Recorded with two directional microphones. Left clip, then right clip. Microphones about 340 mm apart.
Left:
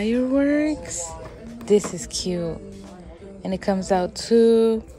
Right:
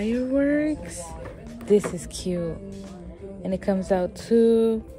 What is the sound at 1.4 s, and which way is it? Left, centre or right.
Speech, centre.